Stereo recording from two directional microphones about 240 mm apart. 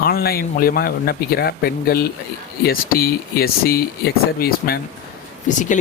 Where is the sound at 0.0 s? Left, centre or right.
Left.